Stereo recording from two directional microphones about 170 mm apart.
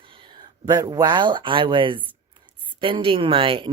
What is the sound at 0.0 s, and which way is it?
Speech, 30° right (ahead or behind).